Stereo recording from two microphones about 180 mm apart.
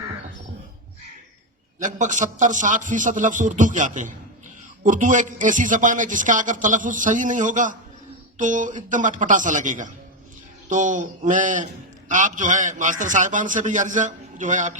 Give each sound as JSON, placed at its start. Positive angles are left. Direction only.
{"t": 1.8, "sound": "a man's voice", "side_deg": -45}